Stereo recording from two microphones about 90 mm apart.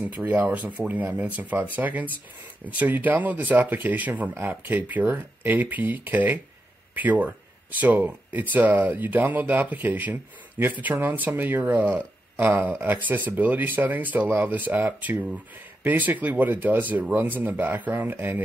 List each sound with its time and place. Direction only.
0.0 s speech: 15° right (ahead or behind)